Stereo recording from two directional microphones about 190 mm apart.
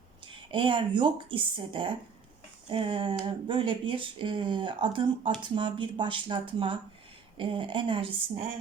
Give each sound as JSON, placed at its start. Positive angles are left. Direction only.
{"t": 0.5, "sound": "speech", "side_deg": -25}